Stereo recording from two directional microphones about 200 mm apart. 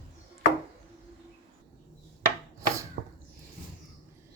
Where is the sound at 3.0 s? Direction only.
50° right (ahead or behind).